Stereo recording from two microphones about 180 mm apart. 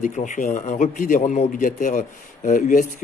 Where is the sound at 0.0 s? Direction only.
45° left (ahead or behind).